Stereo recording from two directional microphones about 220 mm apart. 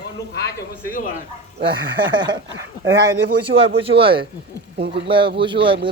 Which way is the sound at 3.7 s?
25° right (ahead or behind).